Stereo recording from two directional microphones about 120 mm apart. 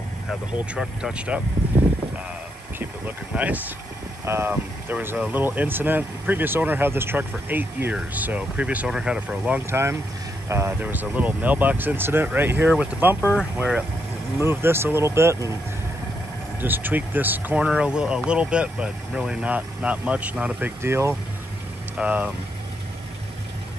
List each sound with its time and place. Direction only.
0.3 s speech: 5° right (ahead or behind)
2.8 s speech: 15° right (ahead or behind)
9.7 s speech: 20° right (ahead or behind)
13.2 s speech: 10° left (ahead or behind)
13.6 s speech: 10° right (ahead or behind)
16.6 s speech: 15° right (ahead or behind)
20.8 s speech: 20° right (ahead or behind)
21.9 s speech: 10° right (ahead or behind)